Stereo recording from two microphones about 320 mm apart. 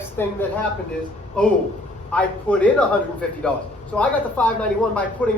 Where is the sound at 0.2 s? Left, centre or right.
Centre.